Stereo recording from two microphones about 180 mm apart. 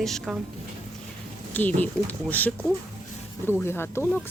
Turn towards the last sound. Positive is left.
turn(degrees=15)  # may be behind; listen again after turning